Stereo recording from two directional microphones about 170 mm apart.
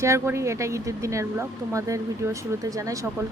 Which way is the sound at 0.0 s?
15° right (ahead or behind).